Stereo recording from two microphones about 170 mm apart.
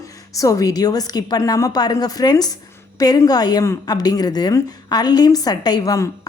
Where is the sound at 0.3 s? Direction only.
20° left (ahead or behind).